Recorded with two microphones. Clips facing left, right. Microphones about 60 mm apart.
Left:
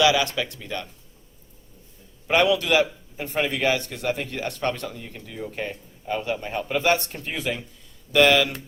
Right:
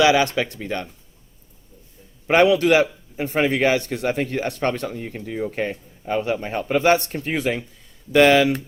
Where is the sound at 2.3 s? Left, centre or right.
Right.